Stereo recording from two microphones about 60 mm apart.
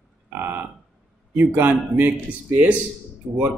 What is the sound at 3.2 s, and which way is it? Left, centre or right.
Speech, centre.